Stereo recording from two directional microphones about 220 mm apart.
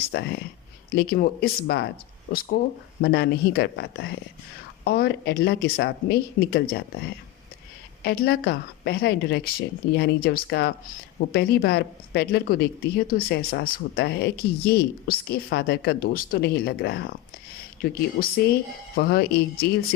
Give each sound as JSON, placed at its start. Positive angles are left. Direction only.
{"t": 0.1, "sound": "speech", "side_deg": 45}
{"t": 8.0, "sound": "speech", "side_deg": 45}